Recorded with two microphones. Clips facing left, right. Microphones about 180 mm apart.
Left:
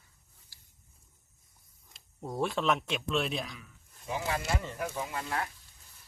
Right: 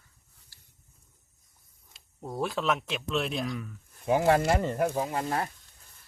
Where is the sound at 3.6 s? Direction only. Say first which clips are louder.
Right 12 dB; 60° right (ahead or behind); by 5.5 s 40° right (ahead or behind).